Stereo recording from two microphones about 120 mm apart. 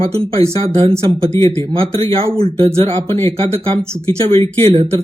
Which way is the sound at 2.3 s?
50° right (ahead or behind).